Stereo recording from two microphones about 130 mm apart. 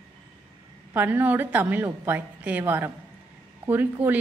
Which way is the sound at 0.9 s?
15° right (ahead or behind).